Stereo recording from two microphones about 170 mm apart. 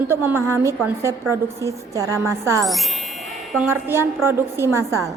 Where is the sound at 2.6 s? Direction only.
Centre (ahead or behind).